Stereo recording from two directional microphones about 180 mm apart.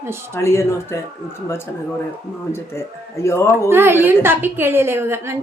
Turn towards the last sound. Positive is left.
turn(degrees=-15)  # may be behind; listen again after turning